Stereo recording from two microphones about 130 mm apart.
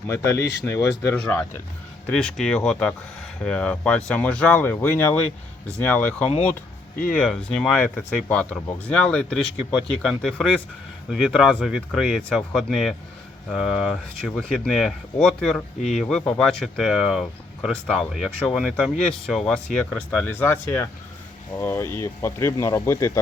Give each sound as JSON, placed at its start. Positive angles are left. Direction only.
{"t": 0.1, "sound": "speech", "side_deg": 25}